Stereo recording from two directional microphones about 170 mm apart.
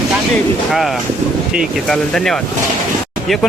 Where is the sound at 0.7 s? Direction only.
Centre (ahead or behind).